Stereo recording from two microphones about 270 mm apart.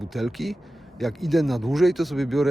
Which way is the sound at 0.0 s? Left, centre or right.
Centre.